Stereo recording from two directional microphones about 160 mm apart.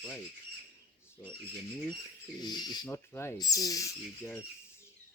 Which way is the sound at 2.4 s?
25° left (ahead or behind).